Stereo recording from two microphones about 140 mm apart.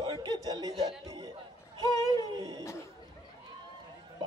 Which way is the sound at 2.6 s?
20° left (ahead or behind).